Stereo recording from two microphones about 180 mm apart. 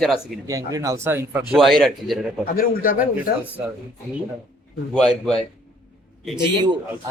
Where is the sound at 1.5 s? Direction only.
Centre (ahead or behind).